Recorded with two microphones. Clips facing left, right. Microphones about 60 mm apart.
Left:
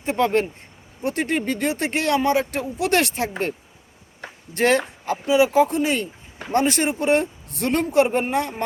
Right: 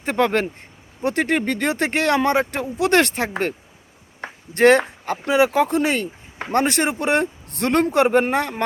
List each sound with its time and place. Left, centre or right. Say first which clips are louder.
0.0 s speech: right 1 dB; right
4.2 s a sound: right 6 dB; right
5.2 s a man's voice: left 1 dB; right